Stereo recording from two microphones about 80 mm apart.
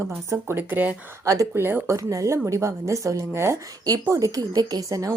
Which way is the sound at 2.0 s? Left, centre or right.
Right.